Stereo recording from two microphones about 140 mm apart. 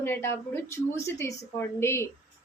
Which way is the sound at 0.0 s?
15° left (ahead or behind).